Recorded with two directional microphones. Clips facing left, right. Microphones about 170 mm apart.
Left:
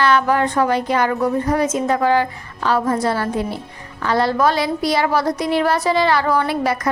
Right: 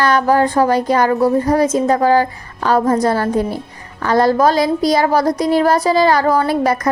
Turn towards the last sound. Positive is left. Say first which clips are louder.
# right 4 dB
turn(degrees=-40)  # may be behind; listen again after turning